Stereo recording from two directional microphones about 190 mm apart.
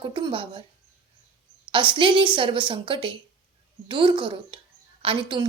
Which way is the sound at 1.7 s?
25° right (ahead or behind).